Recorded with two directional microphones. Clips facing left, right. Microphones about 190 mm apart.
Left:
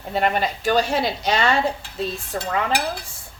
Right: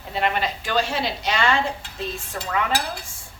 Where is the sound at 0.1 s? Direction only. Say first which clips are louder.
Left 3 dB; 45° left (ahead or behind).